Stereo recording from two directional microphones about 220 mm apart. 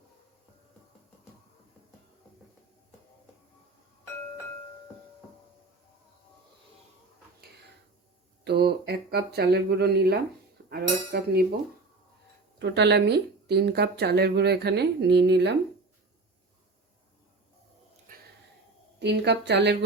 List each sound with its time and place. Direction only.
8.4 s speech: 50° right (ahead or behind)
10.7 s cutlery: 45° right (ahead or behind)
12.5 s speech: 50° right (ahead or behind)
18.1 s a sound: 40° right (ahead or behind)
18.9 s speech: 50° right (ahead or behind)